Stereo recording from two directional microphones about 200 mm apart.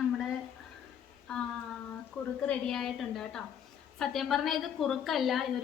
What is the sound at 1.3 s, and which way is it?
Child singing, 5° left (ahead or behind).